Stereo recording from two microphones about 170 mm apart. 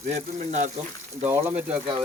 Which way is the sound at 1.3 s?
10° right (ahead or behind).